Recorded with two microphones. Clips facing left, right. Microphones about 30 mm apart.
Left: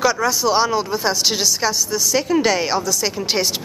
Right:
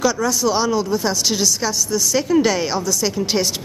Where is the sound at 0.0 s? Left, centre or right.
Left.